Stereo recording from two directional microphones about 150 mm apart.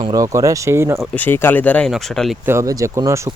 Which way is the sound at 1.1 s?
15° left (ahead or behind).